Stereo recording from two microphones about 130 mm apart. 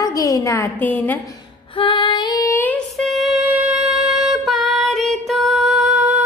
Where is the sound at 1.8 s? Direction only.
40° left (ahead or behind).